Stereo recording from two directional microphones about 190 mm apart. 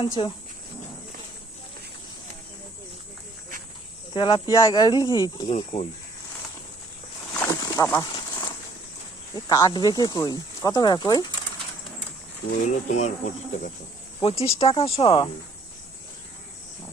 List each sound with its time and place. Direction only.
0.2 s speech: 25° left (ahead or behind)
4.1 s speech: 25° left (ahead or behind)
7.3 s a sound: 15° left (ahead or behind)
9.3 s speech: 20° left (ahead or behind)
12.6 s speech: 40° left (ahead or behind)
14.2 s speech: 30° left (ahead or behind)